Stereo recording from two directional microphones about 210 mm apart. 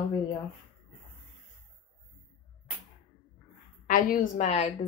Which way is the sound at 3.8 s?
40° left (ahead or behind).